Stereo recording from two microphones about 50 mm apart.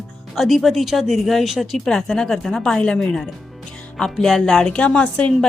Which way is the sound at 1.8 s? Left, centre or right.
Centre.